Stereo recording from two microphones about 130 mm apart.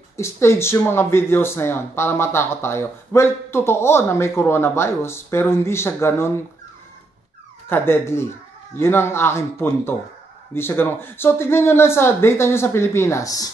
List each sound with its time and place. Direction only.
0.2 s speech: 20° left (ahead or behind)
7.7 s speech: 20° left (ahead or behind)